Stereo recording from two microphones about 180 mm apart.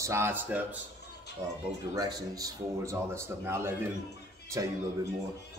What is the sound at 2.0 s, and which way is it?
Speech, 20° right (ahead or behind).